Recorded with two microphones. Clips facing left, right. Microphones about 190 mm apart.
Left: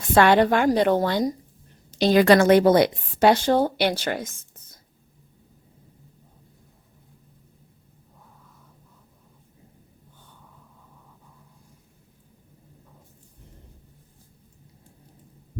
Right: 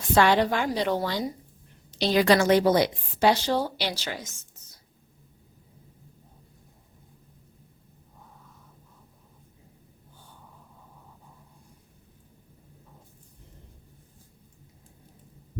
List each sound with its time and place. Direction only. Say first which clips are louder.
0.1 s a woman's voice: left 4 dB; 55° left (ahead or behind)